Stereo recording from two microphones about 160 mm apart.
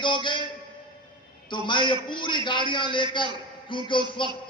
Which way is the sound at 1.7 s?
30° left (ahead or behind).